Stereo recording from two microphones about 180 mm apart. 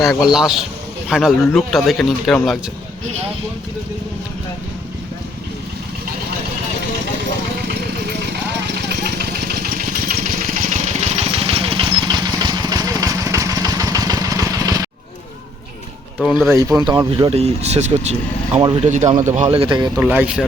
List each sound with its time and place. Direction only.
0.0 s speech: centre (ahead or behind)
8.9 s vehicle: 65° right (ahead or behind); by 14.8 s 20° right (ahead or behind)
16.2 s speech: centre (ahead or behind)
16.5 s speech: 15° right (ahead or behind)
20.0 s speech: 5° right (ahead or behind)